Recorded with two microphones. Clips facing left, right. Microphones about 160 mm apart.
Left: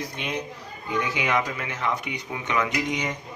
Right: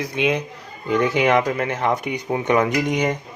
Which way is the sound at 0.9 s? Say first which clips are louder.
Right 8 dB; 55° right (ahead or behind).